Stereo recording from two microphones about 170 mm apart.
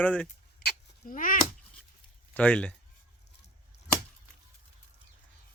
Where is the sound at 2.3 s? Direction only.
10° left (ahead or behind).